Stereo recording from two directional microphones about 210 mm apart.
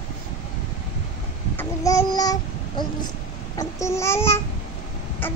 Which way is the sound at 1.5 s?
15° left (ahead or behind).